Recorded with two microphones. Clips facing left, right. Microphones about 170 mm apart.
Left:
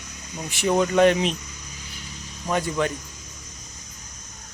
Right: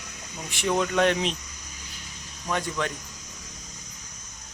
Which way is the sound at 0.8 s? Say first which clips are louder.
Left 6 dB; 5° left (ahead or behind).